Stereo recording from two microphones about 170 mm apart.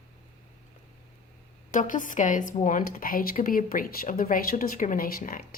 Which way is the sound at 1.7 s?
50° left (ahead or behind).